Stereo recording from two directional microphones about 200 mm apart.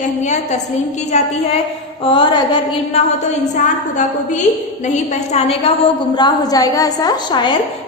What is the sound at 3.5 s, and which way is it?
A woman's voice, 35° left (ahead or behind).